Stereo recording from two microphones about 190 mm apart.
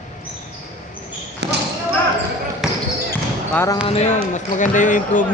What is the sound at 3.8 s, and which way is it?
Speech, 35° left (ahead or behind).